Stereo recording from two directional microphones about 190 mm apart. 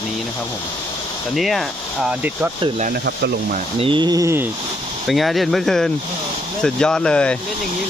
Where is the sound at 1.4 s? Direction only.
Centre (ahead or behind).